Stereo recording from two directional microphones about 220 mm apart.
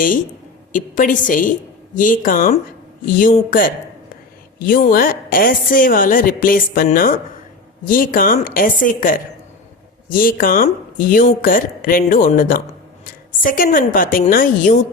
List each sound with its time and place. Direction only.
0.7 s speech: 35° left (ahead or behind)